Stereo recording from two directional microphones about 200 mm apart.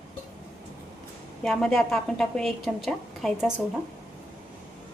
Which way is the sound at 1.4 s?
5° left (ahead or behind).